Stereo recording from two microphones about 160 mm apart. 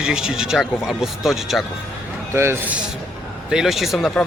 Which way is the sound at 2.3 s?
15° right (ahead or behind).